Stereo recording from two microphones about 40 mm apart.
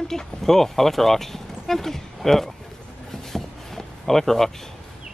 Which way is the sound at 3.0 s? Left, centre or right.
Centre.